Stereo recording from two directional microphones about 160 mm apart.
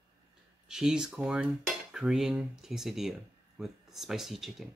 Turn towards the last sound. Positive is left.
turn(degrees=0)  # may be behind; listen again after turning